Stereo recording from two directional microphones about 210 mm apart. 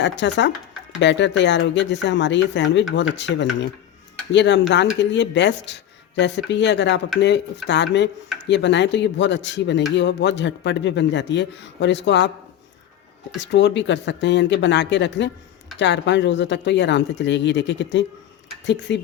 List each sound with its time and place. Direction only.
0.0 s a man's voice: 55° left (ahead or behind)
13.4 s a man's voice: 55° left (ahead or behind)